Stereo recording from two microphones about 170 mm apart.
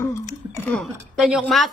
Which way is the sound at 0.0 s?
15° left (ahead or behind).